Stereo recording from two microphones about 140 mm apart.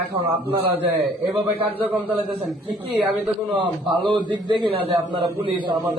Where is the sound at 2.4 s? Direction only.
5° right (ahead or behind).